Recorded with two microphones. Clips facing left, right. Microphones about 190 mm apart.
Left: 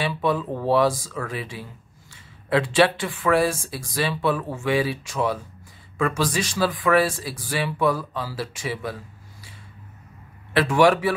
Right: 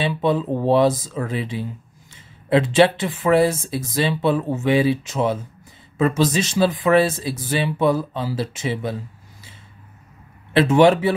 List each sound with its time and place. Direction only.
0.0 s a man's voice: 25° right (ahead or behind)
10.5 s a man's voice: 25° right (ahead or behind)